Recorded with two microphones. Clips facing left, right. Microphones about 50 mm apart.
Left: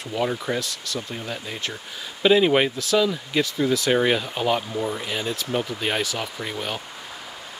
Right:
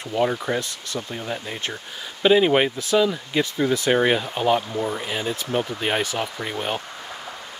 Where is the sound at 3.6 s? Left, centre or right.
Right.